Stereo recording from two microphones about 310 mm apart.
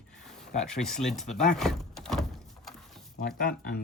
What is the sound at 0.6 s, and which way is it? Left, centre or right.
Speech, centre.